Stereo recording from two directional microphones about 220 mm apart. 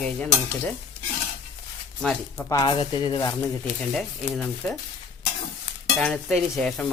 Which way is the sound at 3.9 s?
Centre (ahead or behind).